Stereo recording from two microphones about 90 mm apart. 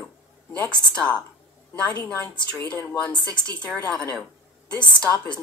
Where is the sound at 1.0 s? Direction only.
10° left (ahead or behind).